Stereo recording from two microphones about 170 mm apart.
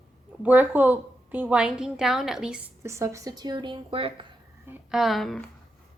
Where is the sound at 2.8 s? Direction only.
15° right (ahead or behind); by 4.2 s 30° right (ahead or behind).